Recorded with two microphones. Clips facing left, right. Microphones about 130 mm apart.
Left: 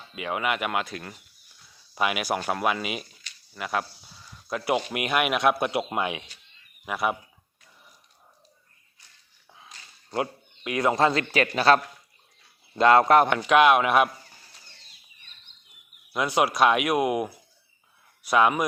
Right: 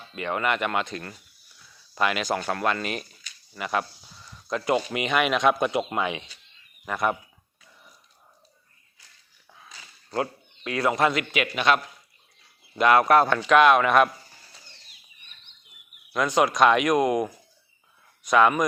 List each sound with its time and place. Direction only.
0.2 s speech: 5° left (ahead or behind)
10.2 s speech: 20° left (ahead or behind)
13.5 s speech: 10° left (ahead or behind)
16.1 s speech: 10° left (ahead or behind)